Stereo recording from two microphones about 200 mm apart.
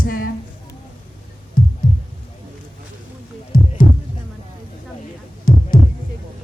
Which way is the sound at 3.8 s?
35° left (ahead or behind).